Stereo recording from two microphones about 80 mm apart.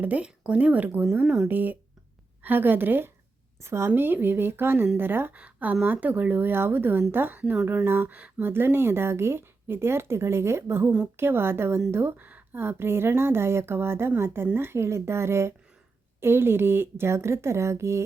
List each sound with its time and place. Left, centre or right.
0.0 s speech: centre
1.5 s a woman's voice: right